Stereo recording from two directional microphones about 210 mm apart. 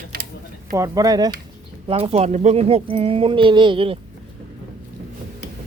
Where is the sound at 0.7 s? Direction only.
20° right (ahead or behind).